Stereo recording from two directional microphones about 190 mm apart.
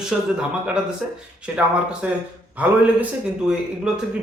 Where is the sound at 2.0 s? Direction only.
10° right (ahead or behind).